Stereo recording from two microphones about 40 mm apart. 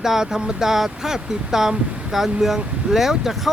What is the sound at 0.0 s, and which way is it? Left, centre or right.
Speech, centre.